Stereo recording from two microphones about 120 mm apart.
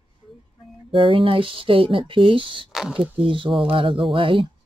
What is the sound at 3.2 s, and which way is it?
Speech, 45° right (ahead or behind).